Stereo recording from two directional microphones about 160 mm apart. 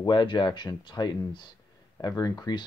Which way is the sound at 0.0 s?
30° left (ahead or behind).